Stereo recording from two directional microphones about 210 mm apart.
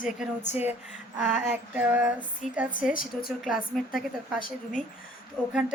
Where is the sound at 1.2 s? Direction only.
5° right (ahead or behind).